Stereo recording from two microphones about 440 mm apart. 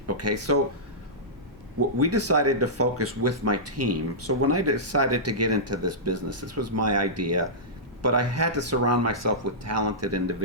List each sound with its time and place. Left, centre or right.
0.1 s speech: right
2.0 s speech: right